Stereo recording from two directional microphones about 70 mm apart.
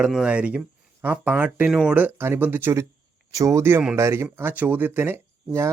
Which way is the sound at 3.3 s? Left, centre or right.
Right.